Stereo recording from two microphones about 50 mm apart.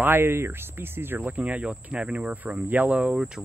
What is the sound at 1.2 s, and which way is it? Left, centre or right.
Speech, right.